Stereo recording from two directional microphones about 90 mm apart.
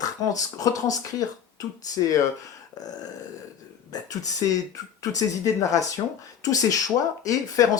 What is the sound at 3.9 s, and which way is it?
Speech, 40° left (ahead or behind).